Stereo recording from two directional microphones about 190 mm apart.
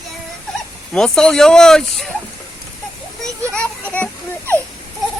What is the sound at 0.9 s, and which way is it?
Speech, 5° left (ahead or behind).